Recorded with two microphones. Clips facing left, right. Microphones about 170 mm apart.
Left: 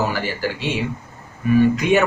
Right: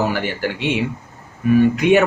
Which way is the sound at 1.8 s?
60° right (ahead or behind).